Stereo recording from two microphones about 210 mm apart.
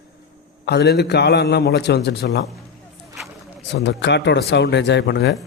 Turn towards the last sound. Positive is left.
turn(degrees=60)  # may be behind; listen again after turning